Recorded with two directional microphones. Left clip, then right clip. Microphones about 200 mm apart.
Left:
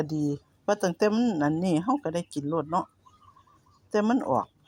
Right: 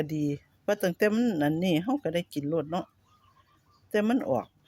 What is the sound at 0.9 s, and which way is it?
Speech, 30° right (ahead or behind).